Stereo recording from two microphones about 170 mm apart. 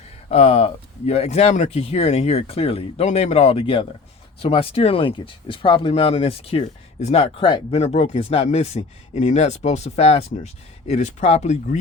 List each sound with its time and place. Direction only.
0.3 s speech: 35° left (ahead or behind)